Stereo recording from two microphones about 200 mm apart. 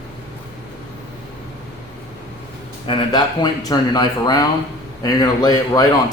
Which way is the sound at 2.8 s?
25° left (ahead or behind).